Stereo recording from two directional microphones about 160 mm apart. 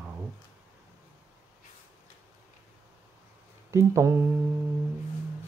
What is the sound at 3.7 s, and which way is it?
Speech, 20° right (ahead or behind).